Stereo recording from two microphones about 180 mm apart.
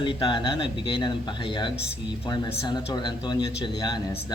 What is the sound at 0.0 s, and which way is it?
A man's voice, 25° left (ahead or behind).